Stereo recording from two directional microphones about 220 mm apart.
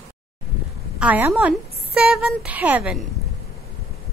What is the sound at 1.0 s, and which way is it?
A woman's voice, 5° right (ahead or behind).